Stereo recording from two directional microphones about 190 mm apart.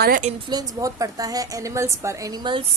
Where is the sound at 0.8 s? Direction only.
15° right (ahead or behind).